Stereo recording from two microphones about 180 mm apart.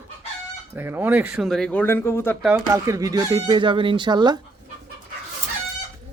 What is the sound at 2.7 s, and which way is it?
Speech, 20° right (ahead or behind).